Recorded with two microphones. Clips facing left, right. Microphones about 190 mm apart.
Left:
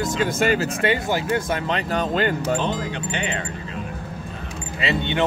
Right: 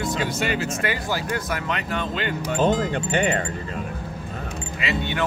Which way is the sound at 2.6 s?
45° right (ahead or behind).